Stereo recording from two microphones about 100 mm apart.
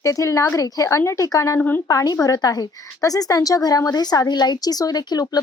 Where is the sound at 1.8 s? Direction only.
35° left (ahead or behind).